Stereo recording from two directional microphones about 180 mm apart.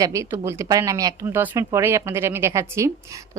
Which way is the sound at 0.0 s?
15° right (ahead or behind).